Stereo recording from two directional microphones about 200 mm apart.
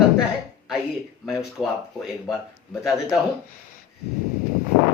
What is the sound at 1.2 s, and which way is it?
Speech, centre (ahead or behind).